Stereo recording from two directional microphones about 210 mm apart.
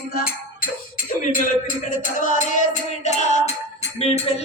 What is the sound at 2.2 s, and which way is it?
Music, 35° left (ahead or behind).